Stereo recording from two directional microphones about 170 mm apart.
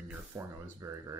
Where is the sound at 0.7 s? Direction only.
20° right (ahead or behind).